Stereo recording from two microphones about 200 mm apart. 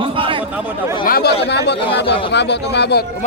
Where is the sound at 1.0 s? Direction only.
50° left (ahead or behind).